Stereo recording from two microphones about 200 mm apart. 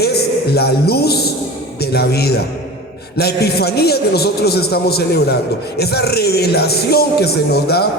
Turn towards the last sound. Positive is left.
turn(degrees=55)  # may be behind; listen again after turning